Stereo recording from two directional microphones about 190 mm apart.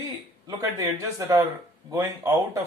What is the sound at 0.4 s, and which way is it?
A man's voice, 15° right (ahead or behind).